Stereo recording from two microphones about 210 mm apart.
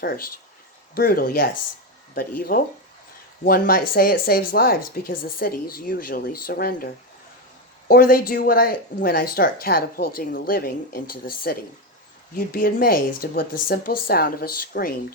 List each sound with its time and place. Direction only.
0.0 s speech: 45° left (ahead or behind)
7.9 s speech: 45° left (ahead or behind)